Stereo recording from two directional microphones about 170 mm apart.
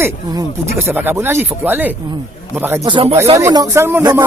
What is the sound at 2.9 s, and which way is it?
Speech, 30° right (ahead or behind).